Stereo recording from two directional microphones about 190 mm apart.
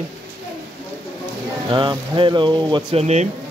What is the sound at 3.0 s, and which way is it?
Speech, 35° right (ahead or behind).